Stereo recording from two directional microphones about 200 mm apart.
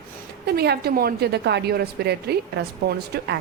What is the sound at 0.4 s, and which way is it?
A woman's voice, 55° right (ahead or behind).